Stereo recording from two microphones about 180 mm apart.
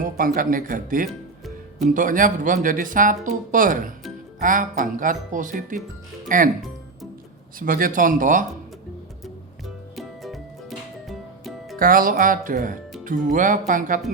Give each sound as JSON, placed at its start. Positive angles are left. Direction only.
{"t": 0.0, "sound": "speech", "side_deg": -50}
{"t": 7.6, "sound": "speech", "side_deg": -50}
{"t": 9.2, "sound": "music", "side_deg": 0}
{"t": 11.8, "sound": "speech", "side_deg": -50}